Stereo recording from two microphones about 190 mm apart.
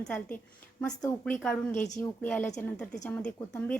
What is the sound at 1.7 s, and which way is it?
Speech, 40° left (ahead or behind).